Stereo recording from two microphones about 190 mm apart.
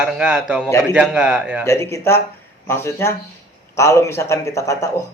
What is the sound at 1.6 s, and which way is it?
Speech, 15° left (ahead or behind).